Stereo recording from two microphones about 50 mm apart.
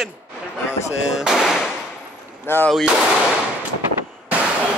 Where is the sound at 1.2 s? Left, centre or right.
Centre.